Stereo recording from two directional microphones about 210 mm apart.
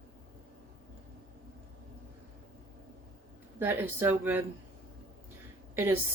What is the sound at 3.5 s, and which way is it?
Speech, 10° right (ahead or behind).